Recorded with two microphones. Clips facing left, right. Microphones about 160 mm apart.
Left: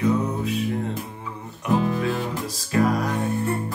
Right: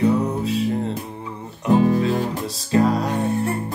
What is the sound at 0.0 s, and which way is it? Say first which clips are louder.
Music: right 3 dB; 30° right (ahead or behind).